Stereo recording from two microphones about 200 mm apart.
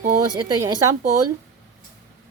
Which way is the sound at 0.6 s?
15° right (ahead or behind).